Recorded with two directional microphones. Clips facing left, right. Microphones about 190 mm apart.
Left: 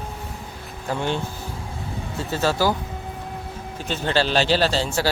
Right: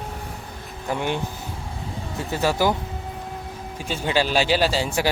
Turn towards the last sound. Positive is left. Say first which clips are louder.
# even
turn(degrees=-10)  # may be behind; listen again after turning